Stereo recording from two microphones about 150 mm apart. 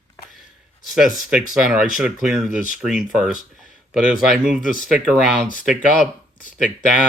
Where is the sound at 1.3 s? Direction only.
5° right (ahead or behind).